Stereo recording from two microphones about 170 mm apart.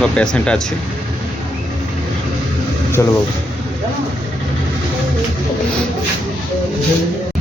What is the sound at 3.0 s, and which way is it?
Speech, 15° left (ahead or behind).